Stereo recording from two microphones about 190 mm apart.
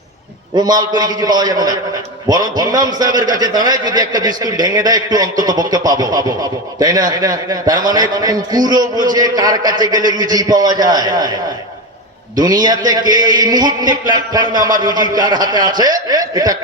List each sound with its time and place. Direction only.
0.5 s a man's voice: 20° right (ahead or behind)
12.4 s a man's voice: 20° right (ahead or behind)